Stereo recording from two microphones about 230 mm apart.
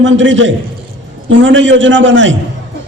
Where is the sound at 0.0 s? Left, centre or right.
Right.